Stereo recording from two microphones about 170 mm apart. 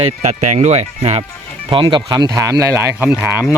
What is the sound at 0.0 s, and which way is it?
Speech, 45° right (ahead or behind).